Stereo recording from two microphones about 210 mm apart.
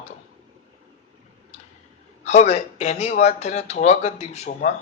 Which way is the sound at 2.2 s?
35° left (ahead or behind).